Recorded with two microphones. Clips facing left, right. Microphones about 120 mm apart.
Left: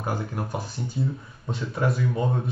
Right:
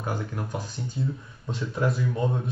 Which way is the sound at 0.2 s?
35° left (ahead or behind).